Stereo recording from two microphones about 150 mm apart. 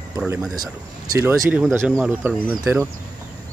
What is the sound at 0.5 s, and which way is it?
Speech, 25° right (ahead or behind).